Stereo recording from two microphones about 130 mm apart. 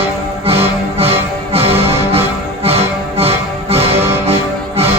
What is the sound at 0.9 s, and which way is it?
Music, 50° right (ahead or behind).